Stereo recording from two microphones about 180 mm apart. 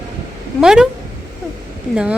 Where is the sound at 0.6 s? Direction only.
5° right (ahead or behind).